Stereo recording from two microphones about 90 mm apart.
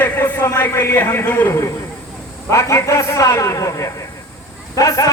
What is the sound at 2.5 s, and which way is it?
A man's voice, 30° left (ahead or behind).